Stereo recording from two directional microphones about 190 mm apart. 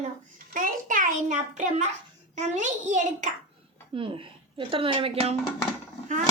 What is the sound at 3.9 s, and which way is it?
Speech, 25° right (ahead or behind).